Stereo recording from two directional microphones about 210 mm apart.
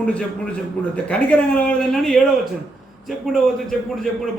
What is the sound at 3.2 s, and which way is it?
Speech, centre (ahead or behind).